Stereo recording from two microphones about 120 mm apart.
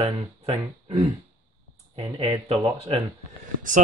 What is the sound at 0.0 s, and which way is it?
Speech, 55° right (ahead or behind).